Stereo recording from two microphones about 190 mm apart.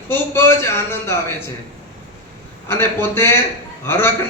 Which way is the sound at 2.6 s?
10° left (ahead or behind).